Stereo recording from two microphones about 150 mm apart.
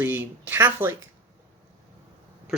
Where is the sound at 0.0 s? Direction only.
15° right (ahead or behind).